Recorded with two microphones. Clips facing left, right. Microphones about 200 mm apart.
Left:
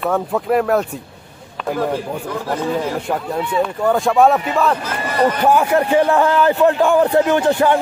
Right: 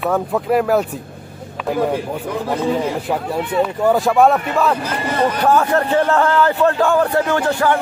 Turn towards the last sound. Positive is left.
turn(degrees=20)  # may be behind; listen again after turning